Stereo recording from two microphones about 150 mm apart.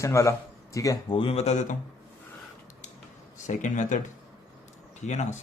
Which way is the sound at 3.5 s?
55° left (ahead or behind).